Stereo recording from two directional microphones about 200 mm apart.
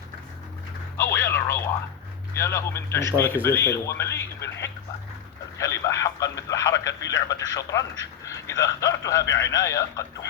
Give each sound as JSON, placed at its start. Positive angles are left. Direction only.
{"t": 0.9, "sound": "a sound", "side_deg": 15}
{"t": 2.4, "sound": "speech", "side_deg": 15}
{"t": 5.5, "sound": "speech", "side_deg": 15}